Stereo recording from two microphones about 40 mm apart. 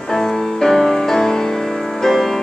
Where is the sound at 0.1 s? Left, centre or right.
Centre.